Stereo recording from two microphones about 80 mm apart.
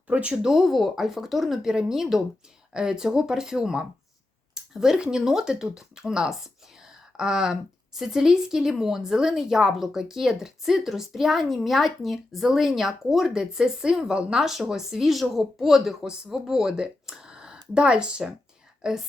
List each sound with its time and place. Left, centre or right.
0.1 s speech: centre
0.4 s speech: centre
4.5 s a sound: centre
5.1 s speech: centre